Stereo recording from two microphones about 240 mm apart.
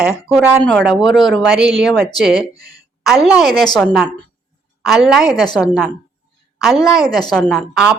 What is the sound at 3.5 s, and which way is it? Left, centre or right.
Speech, centre.